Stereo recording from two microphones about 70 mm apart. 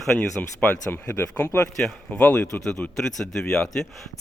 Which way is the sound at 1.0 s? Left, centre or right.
Left.